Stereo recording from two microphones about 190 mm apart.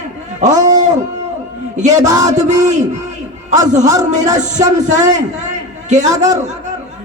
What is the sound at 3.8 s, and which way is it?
Speech, 20° right (ahead or behind).